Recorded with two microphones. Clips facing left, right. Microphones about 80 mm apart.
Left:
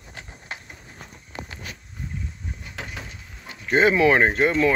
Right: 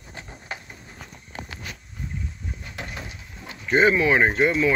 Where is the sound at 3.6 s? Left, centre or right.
Left.